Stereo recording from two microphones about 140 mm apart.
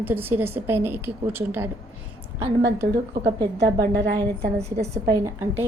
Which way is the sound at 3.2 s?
25° right (ahead or behind).